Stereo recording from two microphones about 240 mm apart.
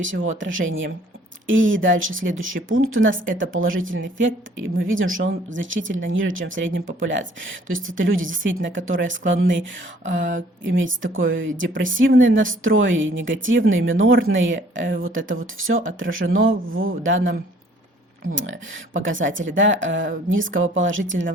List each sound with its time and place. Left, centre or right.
0.0 s speech: right
10.2 s speech: right
10.6 s speech: right
18.3 s speech: right